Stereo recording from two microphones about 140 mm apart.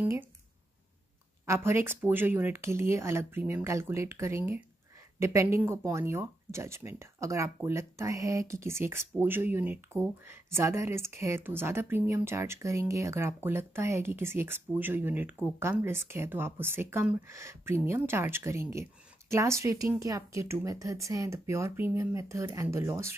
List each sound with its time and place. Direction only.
0.0 s speech: 15° right (ahead or behind)
1.4 s speech: 15° right (ahead or behind)